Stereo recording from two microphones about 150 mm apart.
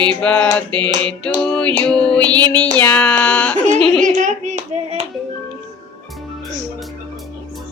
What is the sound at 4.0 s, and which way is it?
Clapping, 60° right (ahead or behind).